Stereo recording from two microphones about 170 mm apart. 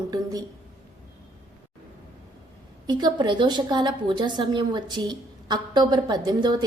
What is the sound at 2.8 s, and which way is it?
A woman's voice, 25° right (ahead or behind).